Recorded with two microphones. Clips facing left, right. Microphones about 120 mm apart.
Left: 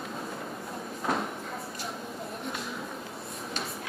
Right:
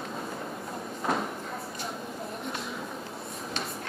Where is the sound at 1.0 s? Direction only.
Centre (ahead or behind).